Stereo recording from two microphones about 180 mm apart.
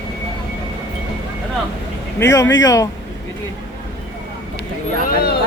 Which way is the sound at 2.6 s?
20° left (ahead or behind).